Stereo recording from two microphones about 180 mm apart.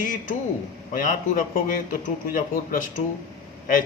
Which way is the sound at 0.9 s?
50° left (ahead or behind).